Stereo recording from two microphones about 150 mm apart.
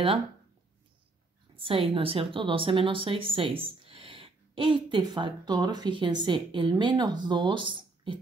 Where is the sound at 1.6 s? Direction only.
35° right (ahead or behind).